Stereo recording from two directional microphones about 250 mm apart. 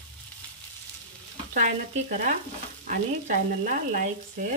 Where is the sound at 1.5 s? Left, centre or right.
Right.